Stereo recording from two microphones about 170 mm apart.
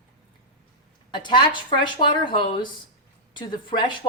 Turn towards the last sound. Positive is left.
turn(degrees=30)  # may be behind; listen again after turning